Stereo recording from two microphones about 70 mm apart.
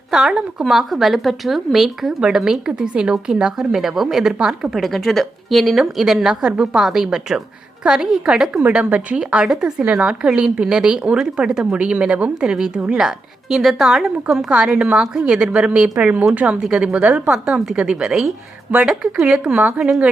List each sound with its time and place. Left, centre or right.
0.1 s a woman's voice: centre